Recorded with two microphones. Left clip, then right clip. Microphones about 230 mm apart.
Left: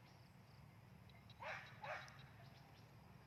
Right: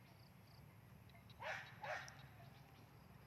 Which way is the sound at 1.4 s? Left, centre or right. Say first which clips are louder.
Right 2 dB; right.